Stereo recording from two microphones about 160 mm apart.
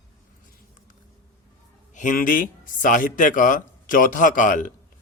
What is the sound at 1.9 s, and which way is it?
A man's voice, 55° left (ahead or behind).